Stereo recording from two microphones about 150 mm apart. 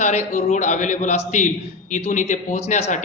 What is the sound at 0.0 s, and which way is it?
A man's voice, 55° left (ahead or behind).